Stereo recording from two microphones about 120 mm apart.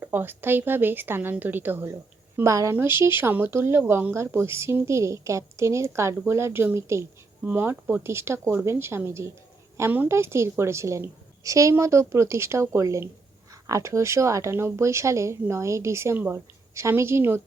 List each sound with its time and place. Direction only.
0.0 s a woman's voice: 20° right (ahead or behind)